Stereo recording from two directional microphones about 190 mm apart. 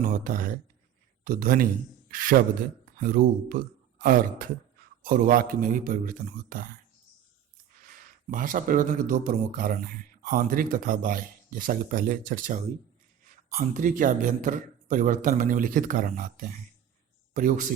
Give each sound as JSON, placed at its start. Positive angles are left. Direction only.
{"t": 0.0, "sound": "speech", "side_deg": -45}
{"t": 7.9, "sound": "speech", "side_deg": -45}
{"t": 13.6, "sound": "speech", "side_deg": -45}